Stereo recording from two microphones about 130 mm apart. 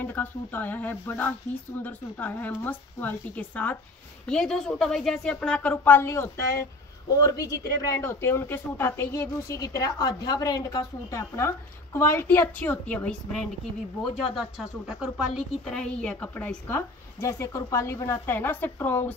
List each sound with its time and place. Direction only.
0.0 s speech: 15° left (ahead or behind)
14.3 s speech: 5° right (ahead or behind)
15.7 s speech: 10° left (ahead or behind)